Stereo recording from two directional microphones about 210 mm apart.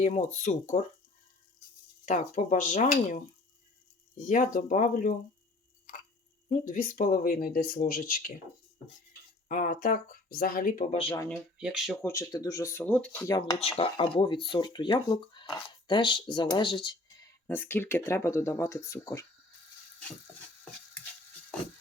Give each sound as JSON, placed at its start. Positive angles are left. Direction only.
{"t": 0.0, "sound": "speech", "side_deg": 30}
{"t": 2.0, "sound": "speech", "side_deg": 35}
{"t": 4.3, "sound": "speech", "side_deg": 35}
{"t": 6.5, "sound": "speech", "side_deg": 35}
{"t": 9.5, "sound": "speech", "side_deg": 40}
{"t": 11.3, "sound": "speech", "side_deg": -5}
{"t": 12.0, "sound": "speech", "side_deg": 15}
{"t": 13.6, "sound": "speech", "side_deg": 30}
{"t": 17.4, "sound": "speech", "side_deg": 10}